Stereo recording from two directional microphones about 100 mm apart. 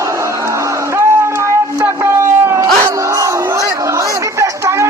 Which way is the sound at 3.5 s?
30° right (ahead or behind).